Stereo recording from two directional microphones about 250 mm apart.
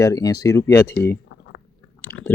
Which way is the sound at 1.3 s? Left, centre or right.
Left.